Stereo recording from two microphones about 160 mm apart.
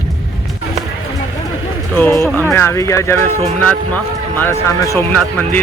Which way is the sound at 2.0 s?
15° left (ahead or behind).